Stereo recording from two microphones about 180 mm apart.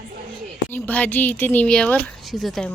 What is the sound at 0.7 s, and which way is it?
Speech, 10° left (ahead or behind).